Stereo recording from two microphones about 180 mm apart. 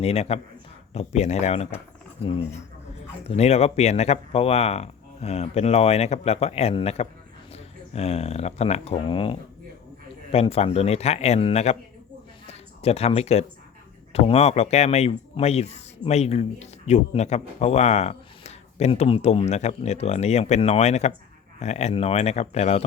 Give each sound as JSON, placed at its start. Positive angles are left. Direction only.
{"t": 0.0, "sound": "speech", "side_deg": 35}
{"t": 12.5, "sound": "a sound", "side_deg": 35}
{"t": 14.1, "sound": "speech", "side_deg": 35}